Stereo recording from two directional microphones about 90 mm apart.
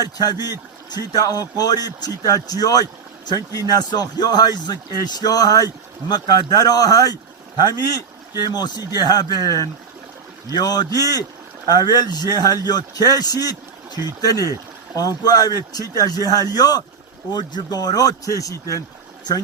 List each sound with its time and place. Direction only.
0.0 s speech: 50° left (ahead or behind)
8.4 s speech: 50° left (ahead or behind)